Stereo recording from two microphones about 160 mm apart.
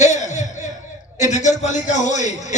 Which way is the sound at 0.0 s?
45° left (ahead or behind).